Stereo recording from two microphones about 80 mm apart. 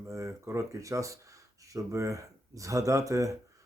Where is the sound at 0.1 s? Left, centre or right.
Right.